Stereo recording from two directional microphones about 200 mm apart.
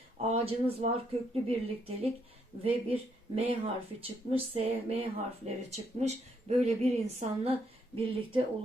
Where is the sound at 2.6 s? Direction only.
25° right (ahead or behind).